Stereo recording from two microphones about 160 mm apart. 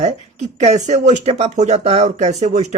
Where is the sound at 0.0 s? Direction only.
45° right (ahead or behind).